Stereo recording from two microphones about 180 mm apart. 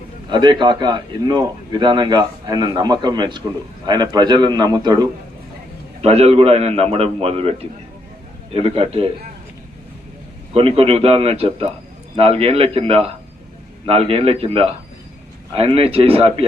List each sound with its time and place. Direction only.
0.3 s a man's voice: 25° right (ahead or behind)
6.0 s a man's voice: 35° right (ahead or behind)
10.5 s a man's voice: 30° right (ahead or behind)